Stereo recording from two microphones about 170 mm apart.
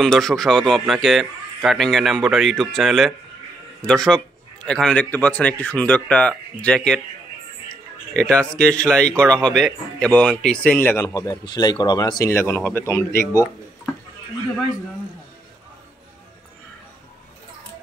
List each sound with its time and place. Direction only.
0.0 s a man's voice: centre (ahead or behind)
8.1 s speech: 5° left (ahead or behind)